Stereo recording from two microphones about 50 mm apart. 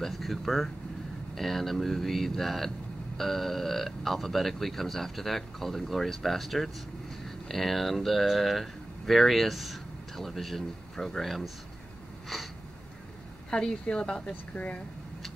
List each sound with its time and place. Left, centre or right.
0.0 s speech: centre
13.5 s a woman's voice: centre
14.5 s speech: left